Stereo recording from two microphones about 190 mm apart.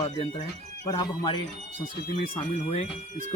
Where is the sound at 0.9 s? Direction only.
25° left (ahead or behind).